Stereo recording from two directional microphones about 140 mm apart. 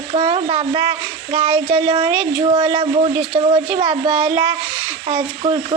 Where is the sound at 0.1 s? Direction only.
45° right (ahead or behind).